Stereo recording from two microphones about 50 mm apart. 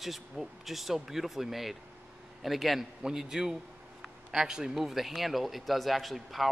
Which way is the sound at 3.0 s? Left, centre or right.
Centre.